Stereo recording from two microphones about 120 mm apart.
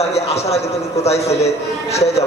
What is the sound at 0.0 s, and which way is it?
A man's voice, 60° left (ahead or behind).